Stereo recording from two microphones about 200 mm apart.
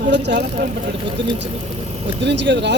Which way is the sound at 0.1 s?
60° right (ahead or behind).